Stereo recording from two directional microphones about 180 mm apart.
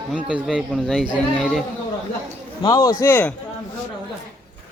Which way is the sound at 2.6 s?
20° left (ahead or behind).